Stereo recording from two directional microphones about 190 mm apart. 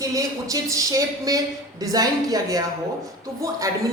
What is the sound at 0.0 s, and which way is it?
A man's voice, 15° right (ahead or behind).